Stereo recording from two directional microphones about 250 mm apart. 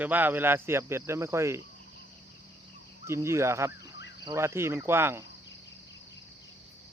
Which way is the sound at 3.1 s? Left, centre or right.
Centre.